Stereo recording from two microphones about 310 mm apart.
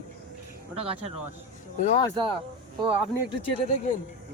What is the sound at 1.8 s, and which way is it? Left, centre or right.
Speech, left.